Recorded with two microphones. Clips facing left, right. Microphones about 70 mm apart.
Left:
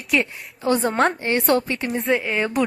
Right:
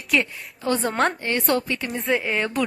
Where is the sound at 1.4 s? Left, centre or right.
Left.